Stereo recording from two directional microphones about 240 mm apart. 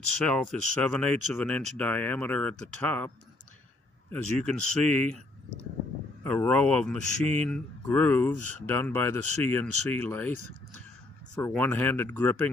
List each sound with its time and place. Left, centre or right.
0.2 s speech: centre
4.1 s speech: centre
6.2 s speech: centre
11.3 s speech: centre